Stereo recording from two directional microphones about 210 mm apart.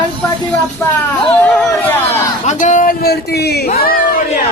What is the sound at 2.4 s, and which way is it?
A man's voice, 35° left (ahead or behind).